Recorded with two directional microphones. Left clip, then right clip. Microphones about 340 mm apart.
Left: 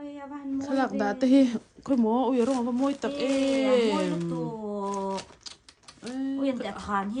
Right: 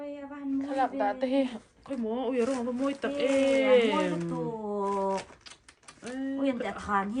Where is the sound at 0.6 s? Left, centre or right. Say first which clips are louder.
Left 1 dB; left.